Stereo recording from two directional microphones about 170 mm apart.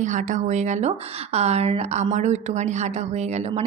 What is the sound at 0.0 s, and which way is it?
Speech, 45° right (ahead or behind).